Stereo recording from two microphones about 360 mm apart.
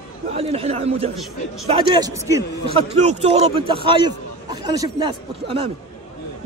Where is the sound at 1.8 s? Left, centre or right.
Centre.